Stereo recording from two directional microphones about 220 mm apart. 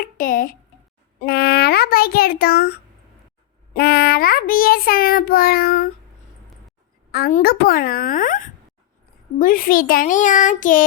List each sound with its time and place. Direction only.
0.0 s speech: 40° left (ahead or behind)
1.2 s a sound: 45° left (ahead or behind)
3.8 s a child's voice: 45° left (ahead or behind)
7.1 s a child's voice: 40° left (ahead or behind)